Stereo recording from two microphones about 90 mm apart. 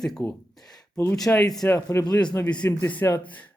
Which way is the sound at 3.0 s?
30° left (ahead or behind).